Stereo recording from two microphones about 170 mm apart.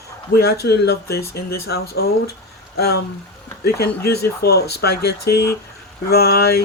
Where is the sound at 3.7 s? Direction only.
70° left (ahead or behind).